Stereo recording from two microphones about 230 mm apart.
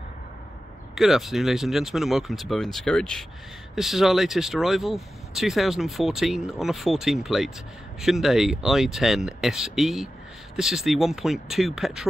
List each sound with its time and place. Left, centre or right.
0.9 s speech: centre